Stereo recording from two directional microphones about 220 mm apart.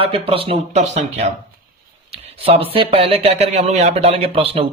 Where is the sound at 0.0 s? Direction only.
25° right (ahead or behind).